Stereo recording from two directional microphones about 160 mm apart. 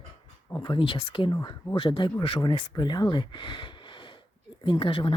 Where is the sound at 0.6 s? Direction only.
30° left (ahead or behind).